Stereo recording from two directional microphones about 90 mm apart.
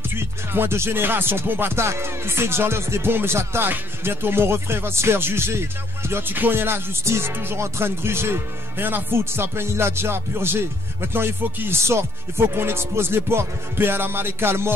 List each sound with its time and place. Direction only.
0.1 s music: 25° right (ahead or behind)